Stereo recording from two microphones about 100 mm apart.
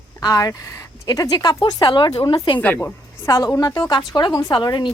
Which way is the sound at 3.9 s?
50° left (ahead or behind).